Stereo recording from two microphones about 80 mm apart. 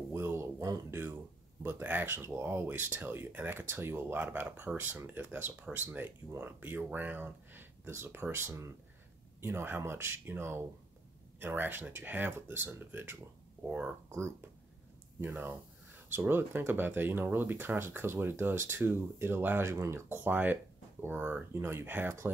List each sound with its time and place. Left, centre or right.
0.1 s a sound: right
1.6 s speech: right
13.7 s speech: centre
15.1 s speech: right